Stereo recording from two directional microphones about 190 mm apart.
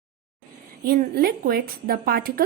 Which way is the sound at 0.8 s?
50° right (ahead or behind).